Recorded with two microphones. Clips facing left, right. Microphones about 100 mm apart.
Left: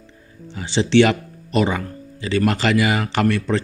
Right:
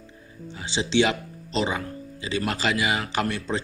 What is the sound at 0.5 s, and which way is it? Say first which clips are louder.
A man's voice: left 8 dB; 60° left (ahead or behind).